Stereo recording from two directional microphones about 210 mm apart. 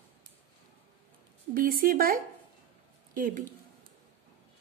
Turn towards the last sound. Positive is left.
turn(degrees=-40)  # may be behind; listen again after turning